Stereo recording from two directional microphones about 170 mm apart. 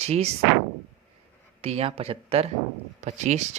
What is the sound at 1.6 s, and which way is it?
Speech, 35° right (ahead or behind).